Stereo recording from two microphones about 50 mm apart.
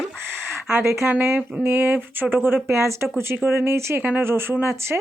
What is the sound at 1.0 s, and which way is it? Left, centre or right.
Speech, right.